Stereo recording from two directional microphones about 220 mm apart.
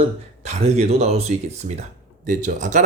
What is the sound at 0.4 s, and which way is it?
Speech, 30° right (ahead or behind).